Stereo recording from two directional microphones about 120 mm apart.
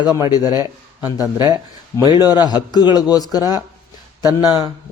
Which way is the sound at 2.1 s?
35° left (ahead or behind).